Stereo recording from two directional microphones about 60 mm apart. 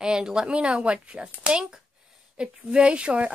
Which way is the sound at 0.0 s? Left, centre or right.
Centre.